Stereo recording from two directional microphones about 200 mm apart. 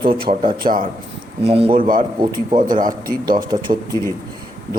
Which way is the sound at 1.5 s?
30° right (ahead or behind).